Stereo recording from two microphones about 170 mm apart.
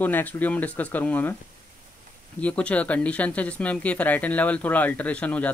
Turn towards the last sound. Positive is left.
turn(degrees=10)  # may be behind; listen again after turning